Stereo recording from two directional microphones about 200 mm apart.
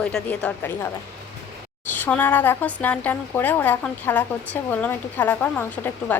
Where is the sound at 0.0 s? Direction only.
5° left (ahead or behind).